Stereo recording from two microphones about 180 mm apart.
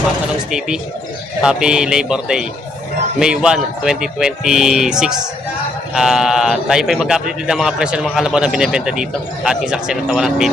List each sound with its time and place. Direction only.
1.4 s speech: 5° right (ahead or behind)